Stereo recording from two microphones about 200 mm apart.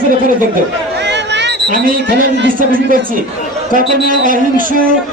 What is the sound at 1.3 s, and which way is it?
Speech, 50° right (ahead or behind).